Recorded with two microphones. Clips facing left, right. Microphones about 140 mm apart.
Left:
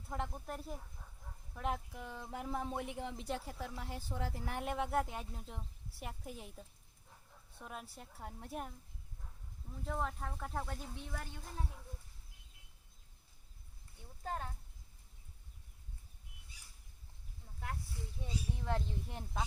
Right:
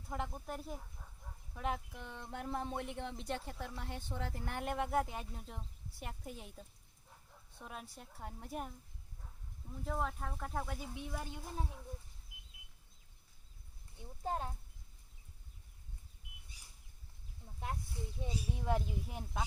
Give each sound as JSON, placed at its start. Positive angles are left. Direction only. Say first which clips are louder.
{"t": 0.1, "sound": "speech", "louder": "even", "side_deg": 0}
{"t": 9.8, "sound": "speech", "louder": "right 1 dB", "side_deg": 0}
{"t": 14.0, "sound": "speech", "louder": "right 3 dB", "side_deg": -20}
{"t": 17.6, "sound": "speech", "louder": "right 2 dB", "side_deg": -20}